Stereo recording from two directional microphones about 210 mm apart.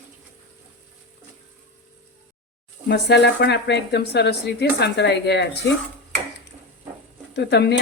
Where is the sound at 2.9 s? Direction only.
50° left (ahead or behind).